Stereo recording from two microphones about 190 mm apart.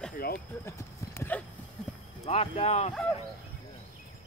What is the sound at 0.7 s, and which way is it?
Clip-clop, 15° left (ahead or behind).